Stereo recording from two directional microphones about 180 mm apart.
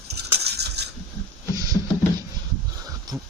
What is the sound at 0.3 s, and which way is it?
Crushing, 65° right (ahead or behind).